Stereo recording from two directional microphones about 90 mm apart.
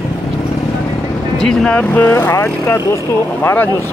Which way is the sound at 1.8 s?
15° left (ahead or behind).